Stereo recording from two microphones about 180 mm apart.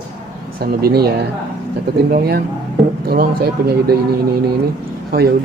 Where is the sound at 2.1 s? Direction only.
60° right (ahead or behind).